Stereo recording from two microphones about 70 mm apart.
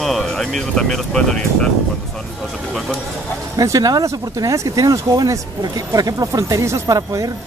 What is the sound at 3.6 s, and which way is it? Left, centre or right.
Speech, right.